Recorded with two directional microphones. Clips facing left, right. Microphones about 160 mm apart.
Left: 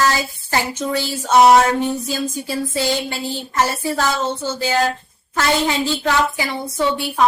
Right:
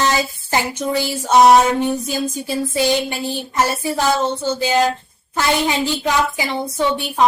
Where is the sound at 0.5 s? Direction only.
15° right (ahead or behind).